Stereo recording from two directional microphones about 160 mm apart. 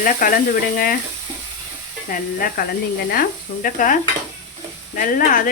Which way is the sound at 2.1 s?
60° left (ahead or behind).